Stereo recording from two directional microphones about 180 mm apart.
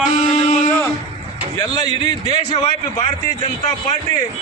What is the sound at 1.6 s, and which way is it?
Speech, 25° left (ahead or behind).